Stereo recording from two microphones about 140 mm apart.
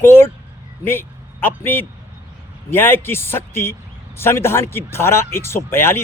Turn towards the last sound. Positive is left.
turn(degrees=15)  # may be behind; listen again after turning